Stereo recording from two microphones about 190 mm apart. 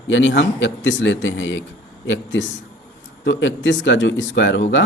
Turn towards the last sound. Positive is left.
turn(degrees=70)  # may be behind; listen again after turning